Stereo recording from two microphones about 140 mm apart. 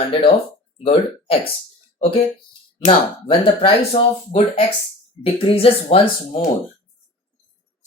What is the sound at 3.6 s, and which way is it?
Speech, 40° left (ahead or behind).